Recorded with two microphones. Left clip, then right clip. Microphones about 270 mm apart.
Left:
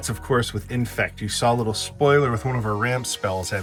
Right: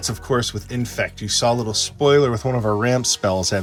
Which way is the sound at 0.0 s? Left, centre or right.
Centre.